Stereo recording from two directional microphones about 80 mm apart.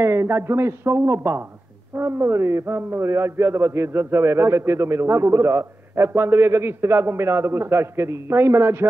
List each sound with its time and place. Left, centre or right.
0.0 s a man's voice: right